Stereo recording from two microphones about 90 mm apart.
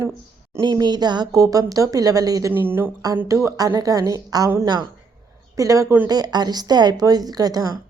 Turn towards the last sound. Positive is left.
turn(degrees=-45)  # may be behind; listen again after turning